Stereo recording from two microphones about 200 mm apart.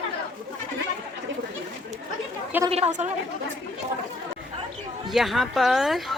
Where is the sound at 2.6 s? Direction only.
30° right (ahead or behind).